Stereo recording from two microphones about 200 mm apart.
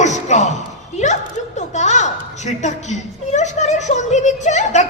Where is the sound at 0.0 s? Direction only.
35° left (ahead or behind).